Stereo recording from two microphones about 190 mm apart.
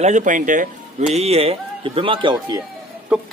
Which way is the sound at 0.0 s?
40° right (ahead or behind).